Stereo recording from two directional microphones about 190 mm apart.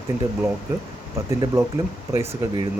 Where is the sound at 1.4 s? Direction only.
15° right (ahead or behind).